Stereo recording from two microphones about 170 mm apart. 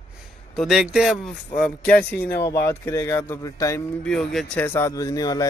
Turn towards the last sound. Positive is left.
turn(degrees=20)  # may be behind; listen again after turning